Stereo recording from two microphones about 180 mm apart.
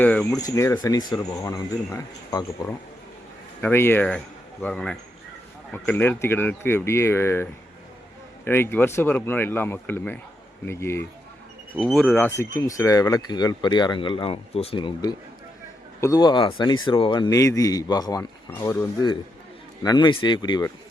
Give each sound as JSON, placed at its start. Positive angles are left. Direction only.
{"t": 0.0, "sound": "speech", "side_deg": 5}
{"t": 0.3, "sound": "speech", "side_deg": 15}
{"t": 8.4, "sound": "speech", "side_deg": 10}
{"t": 11.8, "sound": "speech", "side_deg": 0}
{"t": 12.2, "sound": "speech", "side_deg": 15}